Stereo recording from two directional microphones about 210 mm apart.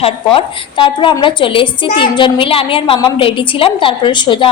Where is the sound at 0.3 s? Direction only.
25° left (ahead or behind).